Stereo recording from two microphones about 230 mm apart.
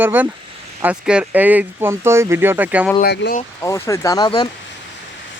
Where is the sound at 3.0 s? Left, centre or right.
Left.